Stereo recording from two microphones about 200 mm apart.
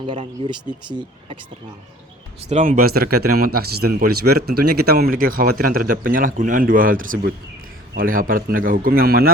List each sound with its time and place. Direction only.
0.0 s speech: 25° right (ahead or behind)
2.5 s speech: 40° right (ahead or behind)